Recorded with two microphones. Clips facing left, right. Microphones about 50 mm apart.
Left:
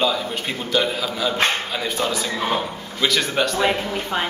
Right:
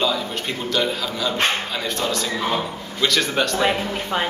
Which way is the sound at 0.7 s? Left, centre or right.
Centre.